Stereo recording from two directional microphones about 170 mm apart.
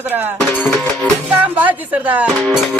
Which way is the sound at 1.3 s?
10° right (ahead or behind).